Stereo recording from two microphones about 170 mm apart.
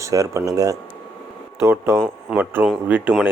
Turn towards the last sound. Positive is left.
turn(degrees=-10)  # may be behind; listen again after turning